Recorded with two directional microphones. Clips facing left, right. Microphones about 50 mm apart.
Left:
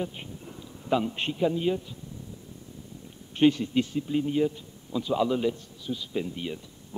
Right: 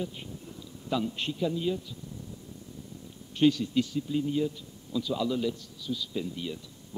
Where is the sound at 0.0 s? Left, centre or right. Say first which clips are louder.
Left 2 dB; left.